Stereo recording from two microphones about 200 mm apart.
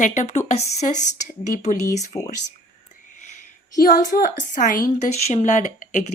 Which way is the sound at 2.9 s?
35° left (ahead or behind).